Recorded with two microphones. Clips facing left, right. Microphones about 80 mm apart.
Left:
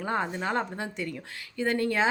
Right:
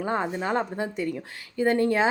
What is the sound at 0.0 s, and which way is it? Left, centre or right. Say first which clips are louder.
A woman's voice: right 2 dB; centre.